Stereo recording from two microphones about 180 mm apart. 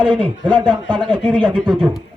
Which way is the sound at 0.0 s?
25° right (ahead or behind).